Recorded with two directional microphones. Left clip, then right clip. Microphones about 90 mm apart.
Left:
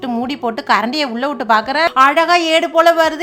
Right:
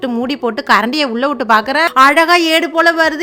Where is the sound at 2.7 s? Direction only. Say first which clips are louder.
Left 2 dB; 20° right (ahead or behind).